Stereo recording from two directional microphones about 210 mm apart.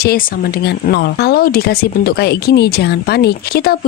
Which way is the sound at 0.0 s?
45° left (ahead or behind).